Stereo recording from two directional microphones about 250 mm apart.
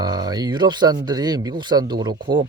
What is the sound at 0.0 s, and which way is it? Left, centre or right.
Speech, centre.